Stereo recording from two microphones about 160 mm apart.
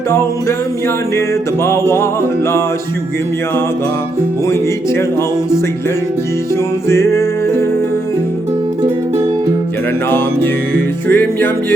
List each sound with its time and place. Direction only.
0.1 s music: 15° left (ahead or behind)
4.4 s music: 15° left (ahead or behind)
6.8 s music: 15° left (ahead or behind)
11.1 s music: 15° left (ahead or behind)